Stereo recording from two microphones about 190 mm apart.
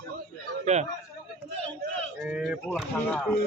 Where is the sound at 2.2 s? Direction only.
5° right (ahead or behind).